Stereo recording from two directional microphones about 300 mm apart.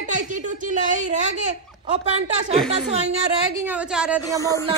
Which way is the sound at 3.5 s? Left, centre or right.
Centre.